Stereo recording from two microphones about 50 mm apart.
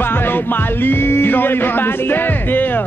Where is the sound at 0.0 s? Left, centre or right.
Left.